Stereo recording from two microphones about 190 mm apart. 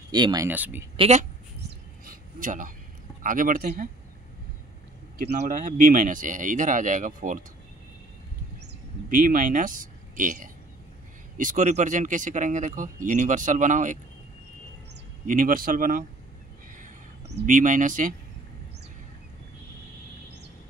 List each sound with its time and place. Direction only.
0.1 s speech: 20° right (ahead or behind)
0.5 s speech: 10° right (ahead or behind)
0.9 s speech: 35° right (ahead or behind)
1.7 s a sound: 45° right (ahead or behind)
3.2 s speech: 45° right (ahead or behind)
5.4 s speech: 45° right (ahead or behind)
9.1 s speech: 45° right (ahead or behind)
15.2 s speech: 45° right (ahead or behind)
17.5 s speech: 45° right (ahead or behind)